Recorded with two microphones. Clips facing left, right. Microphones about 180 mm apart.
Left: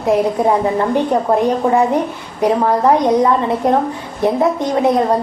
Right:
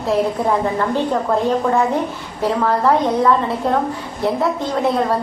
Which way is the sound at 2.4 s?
20° left (ahead or behind).